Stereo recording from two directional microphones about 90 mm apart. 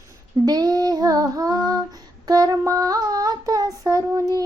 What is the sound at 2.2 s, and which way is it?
Female singing, 45° right (ahead or behind).